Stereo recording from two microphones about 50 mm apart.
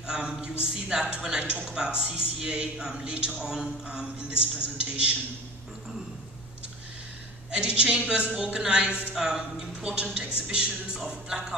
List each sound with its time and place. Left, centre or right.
0.0 s a man's voice: centre
7.5 s a man's voice: centre
9.1 s a man's voice: centre